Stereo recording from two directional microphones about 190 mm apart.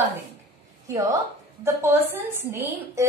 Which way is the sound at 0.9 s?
15° right (ahead or behind).